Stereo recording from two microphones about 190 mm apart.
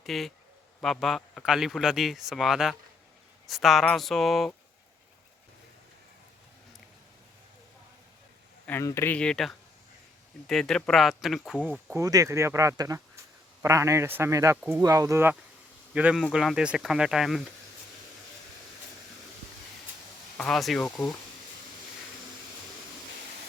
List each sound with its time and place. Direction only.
0.0 s a man's voice: centre (ahead or behind)
8.6 s a man's voice: 15° left (ahead or behind); by 12.0 s 5° right (ahead or behind)
12.0 s a man's voice: 15° right (ahead or behind); by 17.4 s centre (ahead or behind)
20.3 s a man's voice: 5° left (ahead or behind)